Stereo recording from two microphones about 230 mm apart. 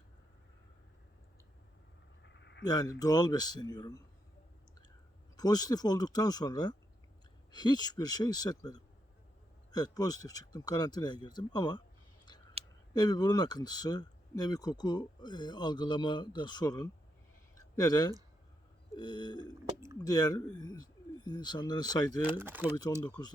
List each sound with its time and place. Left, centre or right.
2.2 s a sound: left
2.6 s speech: centre
5.4 s speech: centre
12.6 s a sound: right
12.9 s speech: centre
18.9 s burping: centre
19.6 s speech: centre
20.0 s speech: centre
22.2 s speech: centre
23.0 s speech: centre